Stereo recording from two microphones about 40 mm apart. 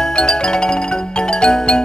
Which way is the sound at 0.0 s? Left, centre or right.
Centre.